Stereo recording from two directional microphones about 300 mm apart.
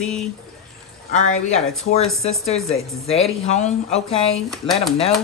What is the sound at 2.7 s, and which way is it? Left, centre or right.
Speech, left.